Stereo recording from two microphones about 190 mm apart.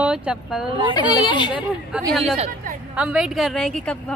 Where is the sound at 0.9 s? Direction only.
25° left (ahead or behind).